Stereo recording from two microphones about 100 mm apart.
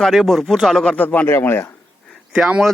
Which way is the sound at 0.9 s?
15° left (ahead or behind).